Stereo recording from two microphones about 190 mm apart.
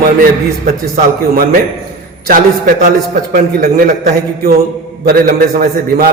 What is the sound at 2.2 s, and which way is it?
A man's voice, 50° right (ahead or behind).